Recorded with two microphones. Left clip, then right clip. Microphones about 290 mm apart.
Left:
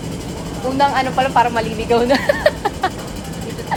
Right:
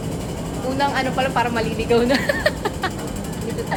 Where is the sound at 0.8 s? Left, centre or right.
Centre.